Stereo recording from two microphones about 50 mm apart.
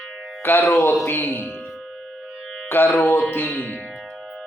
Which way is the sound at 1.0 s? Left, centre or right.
Left.